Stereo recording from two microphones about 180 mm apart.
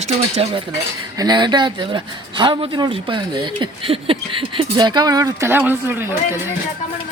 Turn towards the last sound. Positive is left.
turn(degrees=-10)  # may be behind; listen again after turning